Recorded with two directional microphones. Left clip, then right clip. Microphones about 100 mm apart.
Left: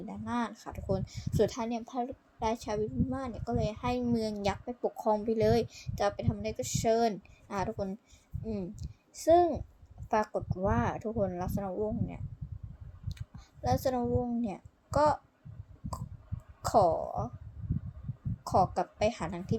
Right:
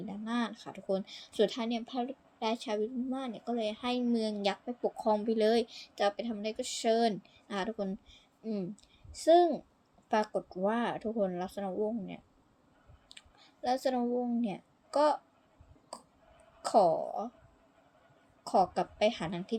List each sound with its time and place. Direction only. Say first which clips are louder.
0.0 s a woman's voice: left 1 dB; centre (ahead or behind)
2.4 s a woman's voice: left 1 dB; 5° left (ahead or behind)
9.1 s a woman's voice: even; 5° right (ahead or behind)
13.1 s a woman's voice: even; centre (ahead or behind)
16.6 s a woman's voice: even; centre (ahead or behind)
18.4 s a woman's voice: left 1 dB; centre (ahead or behind)